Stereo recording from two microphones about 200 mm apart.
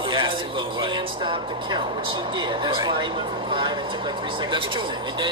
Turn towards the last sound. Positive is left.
turn(degrees=-25)  # may be behind; listen again after turning